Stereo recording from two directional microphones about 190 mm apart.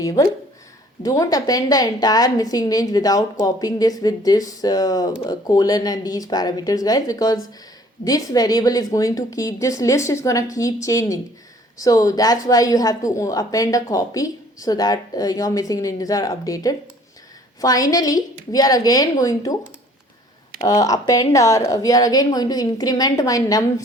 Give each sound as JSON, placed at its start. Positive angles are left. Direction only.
{"t": 0.0, "sound": "a woman's voice", "side_deg": 20}
{"t": 20.6, "sound": "speech", "side_deg": 20}